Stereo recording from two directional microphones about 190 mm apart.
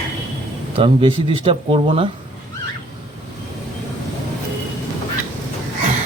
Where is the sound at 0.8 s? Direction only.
30° right (ahead or behind).